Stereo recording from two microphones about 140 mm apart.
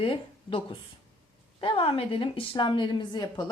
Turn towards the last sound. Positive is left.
turn(degrees=30)  # may be behind; listen again after turning